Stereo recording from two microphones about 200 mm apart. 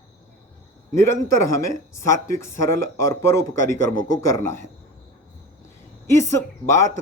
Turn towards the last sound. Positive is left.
turn(degrees=15)  # may be behind; listen again after turning